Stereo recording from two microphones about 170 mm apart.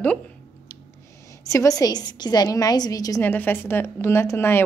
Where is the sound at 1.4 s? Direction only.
20° left (ahead or behind).